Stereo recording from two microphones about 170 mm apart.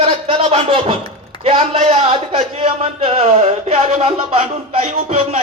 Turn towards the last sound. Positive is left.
turn(degrees=-35)  # may be behind; listen again after turning